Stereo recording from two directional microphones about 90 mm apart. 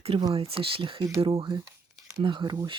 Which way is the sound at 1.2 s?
90° right.